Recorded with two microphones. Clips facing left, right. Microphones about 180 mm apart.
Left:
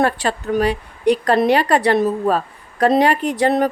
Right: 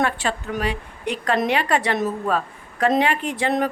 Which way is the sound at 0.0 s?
40° left (ahead or behind).